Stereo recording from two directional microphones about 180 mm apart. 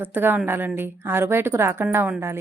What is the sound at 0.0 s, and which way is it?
A woman's voice, 10° right (ahead or behind).